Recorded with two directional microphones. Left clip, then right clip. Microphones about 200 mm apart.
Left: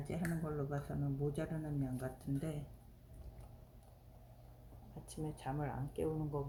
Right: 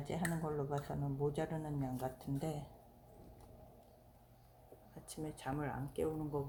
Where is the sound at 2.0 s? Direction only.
5° left (ahead or behind).